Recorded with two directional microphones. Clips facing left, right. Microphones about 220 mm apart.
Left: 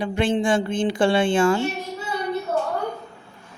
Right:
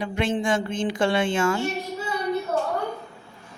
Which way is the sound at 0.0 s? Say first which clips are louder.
Left 3 dB; 30° left (ahead or behind).